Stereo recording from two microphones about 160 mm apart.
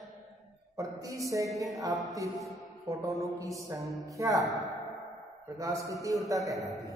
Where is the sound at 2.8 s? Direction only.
20° right (ahead or behind).